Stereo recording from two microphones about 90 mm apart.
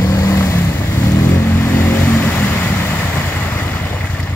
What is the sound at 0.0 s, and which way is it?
Vehicle, 35° left (ahead or behind).